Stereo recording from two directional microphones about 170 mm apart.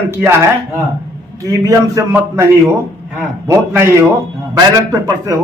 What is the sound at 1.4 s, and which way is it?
Speech, 20° right (ahead or behind).